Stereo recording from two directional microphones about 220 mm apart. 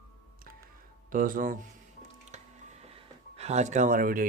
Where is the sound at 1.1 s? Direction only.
40° right (ahead or behind).